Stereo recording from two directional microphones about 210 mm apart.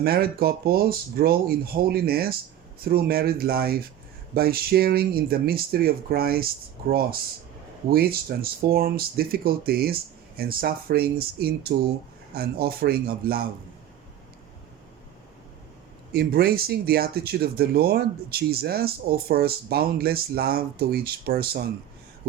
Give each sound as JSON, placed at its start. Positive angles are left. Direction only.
{"t": 0.0, "sound": "speech", "side_deg": -45}
{"t": 16.1, "sound": "speech", "side_deg": -50}